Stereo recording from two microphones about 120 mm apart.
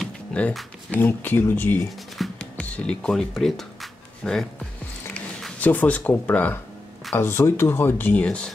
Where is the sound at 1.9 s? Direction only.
Centre (ahead or behind).